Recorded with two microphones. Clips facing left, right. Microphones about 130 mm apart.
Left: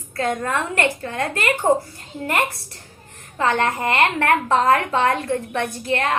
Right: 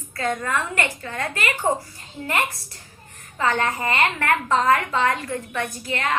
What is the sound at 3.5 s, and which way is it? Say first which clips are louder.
A woman's voice: left 3 dB; 55° left (ahead or behind).